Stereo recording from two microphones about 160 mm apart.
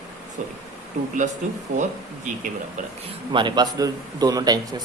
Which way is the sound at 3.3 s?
30° right (ahead or behind).